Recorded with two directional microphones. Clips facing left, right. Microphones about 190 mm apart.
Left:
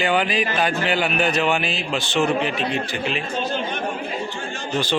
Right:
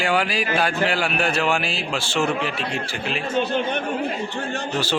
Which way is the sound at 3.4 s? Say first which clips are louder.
Right 2 dB; 60° right (ahead or behind).